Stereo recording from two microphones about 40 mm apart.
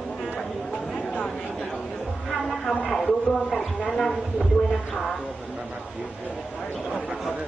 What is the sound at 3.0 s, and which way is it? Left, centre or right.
Speech, centre.